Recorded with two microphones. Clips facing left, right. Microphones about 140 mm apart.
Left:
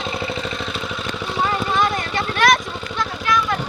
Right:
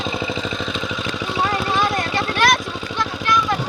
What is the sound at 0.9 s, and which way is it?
Vehicle, 90° right.